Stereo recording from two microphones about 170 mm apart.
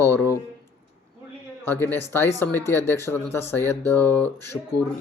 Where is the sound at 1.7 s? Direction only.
15° left (ahead or behind).